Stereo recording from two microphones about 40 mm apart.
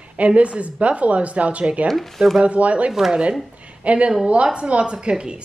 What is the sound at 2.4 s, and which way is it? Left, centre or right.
Speech, right.